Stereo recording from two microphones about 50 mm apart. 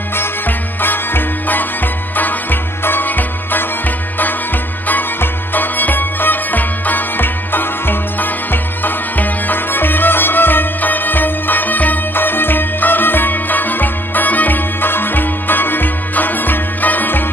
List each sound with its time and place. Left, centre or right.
0.1 s music: left
4.8 s music: left